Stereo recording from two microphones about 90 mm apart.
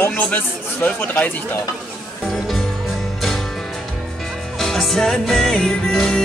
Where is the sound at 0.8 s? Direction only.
20° left (ahead or behind).